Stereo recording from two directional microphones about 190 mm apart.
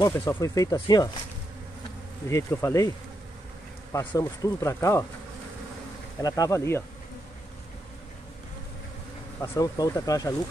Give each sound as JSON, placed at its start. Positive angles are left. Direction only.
{"t": 0.1, "sound": "speech", "side_deg": 15}
{"t": 2.2, "sound": "speech", "side_deg": 15}
{"t": 3.9, "sound": "speech", "side_deg": 15}
{"t": 6.2, "sound": "speech", "side_deg": 20}
{"t": 9.4, "sound": "speech", "side_deg": 20}